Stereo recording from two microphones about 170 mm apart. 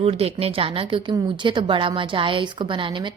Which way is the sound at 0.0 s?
35° right (ahead or behind).